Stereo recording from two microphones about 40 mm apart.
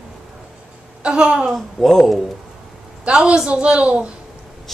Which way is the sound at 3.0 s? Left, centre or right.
Right.